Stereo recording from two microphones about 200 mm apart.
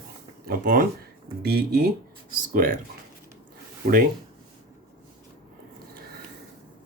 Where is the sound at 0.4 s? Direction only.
45° right (ahead or behind).